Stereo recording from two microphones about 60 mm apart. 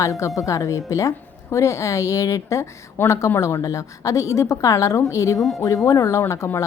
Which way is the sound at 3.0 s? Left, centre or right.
Left.